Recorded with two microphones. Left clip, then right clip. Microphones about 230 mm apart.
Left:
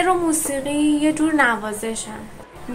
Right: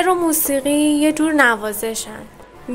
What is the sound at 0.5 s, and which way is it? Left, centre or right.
A woman's voice, right.